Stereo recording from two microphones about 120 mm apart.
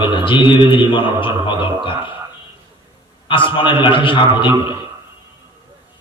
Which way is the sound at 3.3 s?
45° left (ahead or behind).